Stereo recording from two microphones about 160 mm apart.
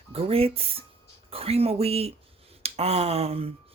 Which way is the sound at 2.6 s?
40° right (ahead or behind).